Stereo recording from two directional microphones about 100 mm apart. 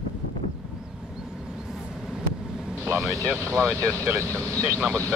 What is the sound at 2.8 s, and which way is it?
Speech, 30° right (ahead or behind).